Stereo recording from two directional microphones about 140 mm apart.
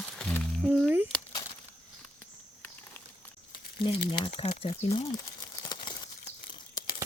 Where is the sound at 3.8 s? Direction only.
35° left (ahead or behind).